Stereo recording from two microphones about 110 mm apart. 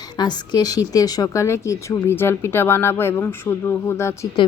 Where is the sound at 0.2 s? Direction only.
40° left (ahead or behind); by 4.3 s 25° left (ahead or behind).